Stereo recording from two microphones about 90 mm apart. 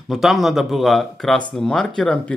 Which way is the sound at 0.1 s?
Centre (ahead or behind).